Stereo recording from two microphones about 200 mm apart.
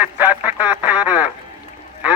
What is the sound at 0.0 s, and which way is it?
Speech, 10° right (ahead or behind).